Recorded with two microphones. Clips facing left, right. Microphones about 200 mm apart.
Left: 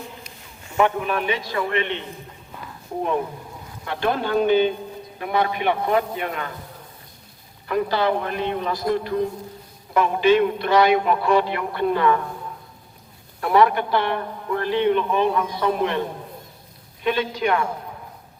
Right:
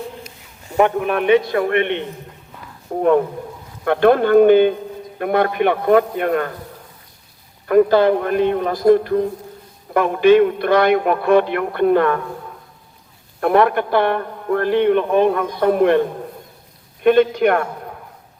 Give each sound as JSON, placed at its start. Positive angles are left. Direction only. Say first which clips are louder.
{"t": 0.8, "sound": "a man's voice", "louder": "right 4 dB", "side_deg": -50}
{"t": 7.7, "sound": "a man's voice", "louder": "right 9 dB", "side_deg": -50}
{"t": 13.4, "sound": "a man's voice", "louder": "right 3 dB", "side_deg": -55}